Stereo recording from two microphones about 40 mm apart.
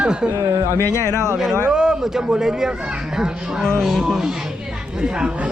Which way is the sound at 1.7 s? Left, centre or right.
Centre.